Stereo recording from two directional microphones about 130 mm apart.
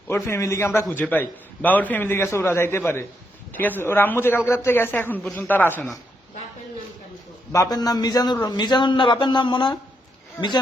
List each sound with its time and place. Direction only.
0.1 s a man's voice: 20° left (ahead or behind)
7.5 s a man's voice: 25° left (ahead or behind)